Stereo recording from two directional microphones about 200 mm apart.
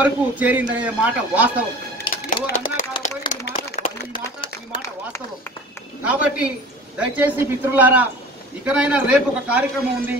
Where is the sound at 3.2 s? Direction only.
25° left (ahead or behind).